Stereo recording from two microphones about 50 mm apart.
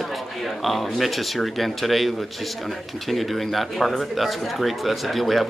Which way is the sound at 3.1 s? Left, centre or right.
Centre.